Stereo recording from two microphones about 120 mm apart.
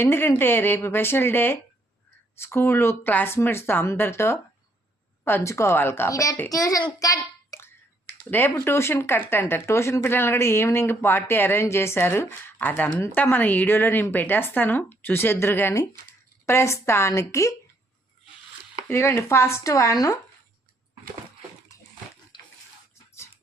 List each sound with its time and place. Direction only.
0.0 s a child's voice: 20° left (ahead or behind)
18.9 s speech: 20° left (ahead or behind)
22.3 s bathtub: 40° left (ahead or behind)